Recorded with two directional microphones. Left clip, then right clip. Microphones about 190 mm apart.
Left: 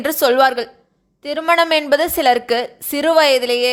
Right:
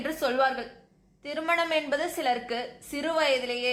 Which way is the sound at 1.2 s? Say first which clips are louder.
Left 12 dB; 45° left (ahead or behind).